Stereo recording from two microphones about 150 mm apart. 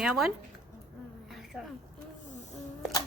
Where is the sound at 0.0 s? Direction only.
5° right (ahead or behind).